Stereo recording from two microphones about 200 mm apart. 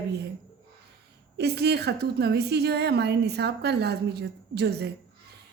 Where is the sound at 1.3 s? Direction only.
55° right (ahead or behind).